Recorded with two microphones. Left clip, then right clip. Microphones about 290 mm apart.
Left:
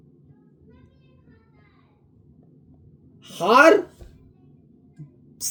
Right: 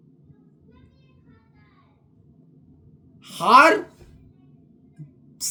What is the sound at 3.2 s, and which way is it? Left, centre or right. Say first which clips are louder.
Speech: right 2 dB; centre.